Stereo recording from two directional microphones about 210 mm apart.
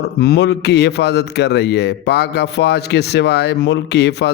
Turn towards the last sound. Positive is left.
turn(degrees=55)  # may be behind; listen again after turning